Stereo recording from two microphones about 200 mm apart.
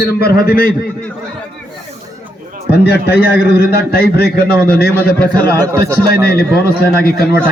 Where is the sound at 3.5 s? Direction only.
50° left (ahead or behind).